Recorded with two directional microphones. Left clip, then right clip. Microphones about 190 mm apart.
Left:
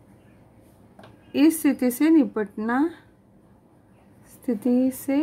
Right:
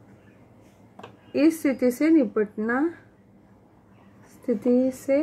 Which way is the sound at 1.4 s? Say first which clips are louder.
Even; 65° left (ahead or behind).